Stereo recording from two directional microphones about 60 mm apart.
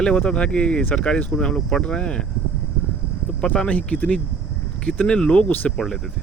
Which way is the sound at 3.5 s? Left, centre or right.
Left.